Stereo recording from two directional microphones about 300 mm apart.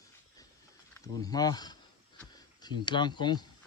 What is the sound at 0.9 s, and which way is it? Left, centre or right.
Speech, centre.